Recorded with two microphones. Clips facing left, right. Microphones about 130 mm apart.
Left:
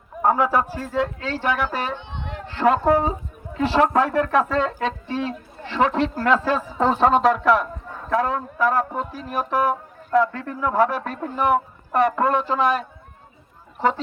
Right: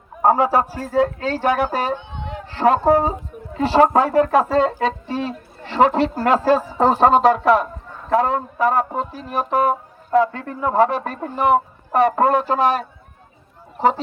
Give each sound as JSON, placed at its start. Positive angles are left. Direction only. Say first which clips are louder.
{"t": 0.2, "sound": "a man's voice", "louder": "right 3 dB", "side_deg": -35}
{"t": 12.2, "sound": "speech", "louder": "right 4 dB", "side_deg": -50}